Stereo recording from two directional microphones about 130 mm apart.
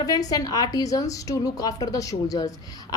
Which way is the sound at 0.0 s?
30° left (ahead or behind).